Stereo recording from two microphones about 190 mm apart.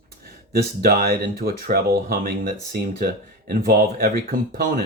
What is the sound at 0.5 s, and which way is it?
Speech, 50° right (ahead or behind).